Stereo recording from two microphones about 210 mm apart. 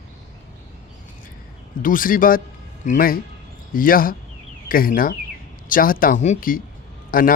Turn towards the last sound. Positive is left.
turn(degrees=45)  # may be behind; listen again after turning